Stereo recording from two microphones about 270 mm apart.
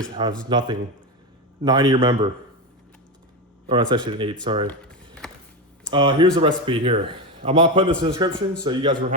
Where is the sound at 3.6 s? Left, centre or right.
Centre.